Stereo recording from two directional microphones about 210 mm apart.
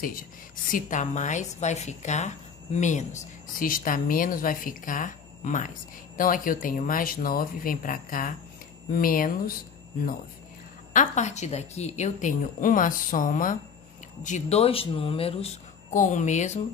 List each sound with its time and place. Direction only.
0.0 s a woman's voice: 40° left (ahead or behind)
10.9 s a woman's voice: 35° left (ahead or behind)